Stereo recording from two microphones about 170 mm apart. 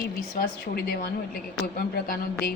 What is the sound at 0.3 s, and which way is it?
Speech, 65° left (ahead or behind).